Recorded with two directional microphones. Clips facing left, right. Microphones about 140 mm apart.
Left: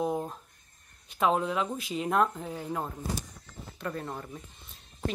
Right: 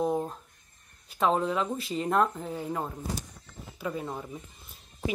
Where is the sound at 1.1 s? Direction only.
Centre (ahead or behind).